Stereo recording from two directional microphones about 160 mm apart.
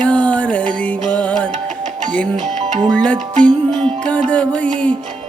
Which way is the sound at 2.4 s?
50° right (ahead or behind).